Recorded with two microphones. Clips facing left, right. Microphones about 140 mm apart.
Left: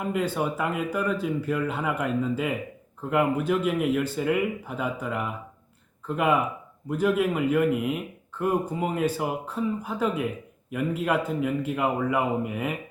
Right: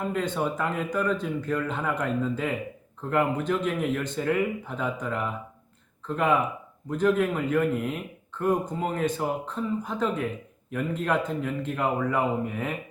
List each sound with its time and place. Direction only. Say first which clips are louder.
0.0 s speech: left 1 dB; 10° left (ahead or behind)